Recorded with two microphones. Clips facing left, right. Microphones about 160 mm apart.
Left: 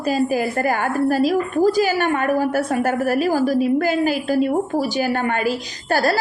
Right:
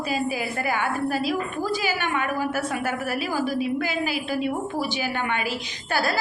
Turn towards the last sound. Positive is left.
turn(degrees=40)  # may be behind; listen again after turning